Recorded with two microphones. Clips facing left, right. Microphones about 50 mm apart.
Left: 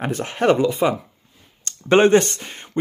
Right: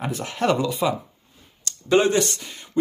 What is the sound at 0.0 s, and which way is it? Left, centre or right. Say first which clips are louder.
Speech: left 4 dB; left.